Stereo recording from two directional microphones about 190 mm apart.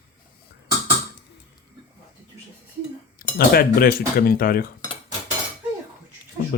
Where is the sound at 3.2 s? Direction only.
50° left (ahead or behind).